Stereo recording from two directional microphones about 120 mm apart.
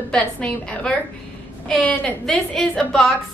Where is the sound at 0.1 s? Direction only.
10° left (ahead or behind).